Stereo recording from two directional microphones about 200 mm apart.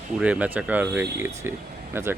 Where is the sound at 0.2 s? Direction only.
5° right (ahead or behind).